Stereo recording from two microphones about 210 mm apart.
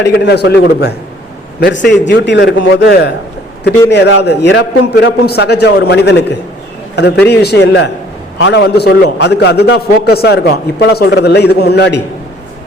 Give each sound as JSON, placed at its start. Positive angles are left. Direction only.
{"t": 0.0, "sound": "a man's voice", "side_deg": 50}